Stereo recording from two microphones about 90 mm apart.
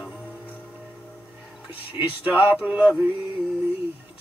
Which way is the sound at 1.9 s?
15° right (ahead or behind).